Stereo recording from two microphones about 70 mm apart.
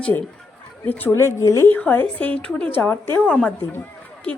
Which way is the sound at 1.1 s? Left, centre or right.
Left.